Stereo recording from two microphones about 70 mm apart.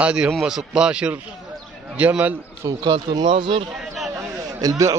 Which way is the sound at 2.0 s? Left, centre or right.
Right.